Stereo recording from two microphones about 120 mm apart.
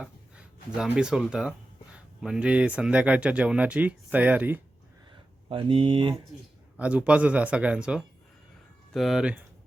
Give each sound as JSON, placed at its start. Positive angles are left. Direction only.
{"t": 0.0, "sound": "speech", "side_deg": -10}
{"t": 5.5, "sound": "speech", "side_deg": -45}
{"t": 6.7, "sound": "speech", "side_deg": -10}